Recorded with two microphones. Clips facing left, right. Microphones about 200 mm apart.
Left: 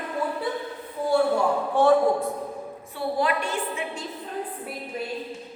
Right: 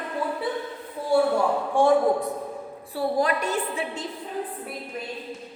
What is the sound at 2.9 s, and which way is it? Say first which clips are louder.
Speech: right 2 dB; 40° right (ahead or behind).